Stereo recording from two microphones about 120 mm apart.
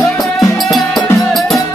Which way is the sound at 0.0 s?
25° left (ahead or behind).